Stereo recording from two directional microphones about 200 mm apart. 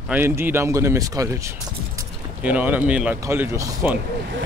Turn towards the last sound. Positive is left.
turn(degrees=-15)  # may be behind; listen again after turning